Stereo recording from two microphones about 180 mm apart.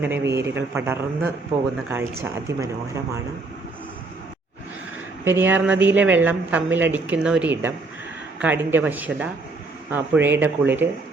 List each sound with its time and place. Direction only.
0.0 s speech: 15° right (ahead or behind)
5.2 s speech: 10° right (ahead or behind)